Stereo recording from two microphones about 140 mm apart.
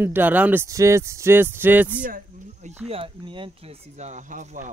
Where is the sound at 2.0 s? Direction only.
80° right.